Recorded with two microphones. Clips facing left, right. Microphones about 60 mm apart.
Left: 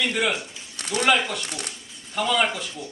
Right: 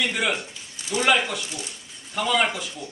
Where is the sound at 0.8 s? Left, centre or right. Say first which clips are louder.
Even; left.